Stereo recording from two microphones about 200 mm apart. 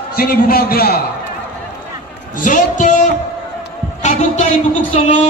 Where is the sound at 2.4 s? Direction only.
40° left (ahead or behind).